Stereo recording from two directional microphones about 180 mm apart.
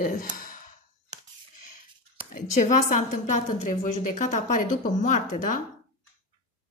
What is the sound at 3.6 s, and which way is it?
Speech, 40° left (ahead or behind).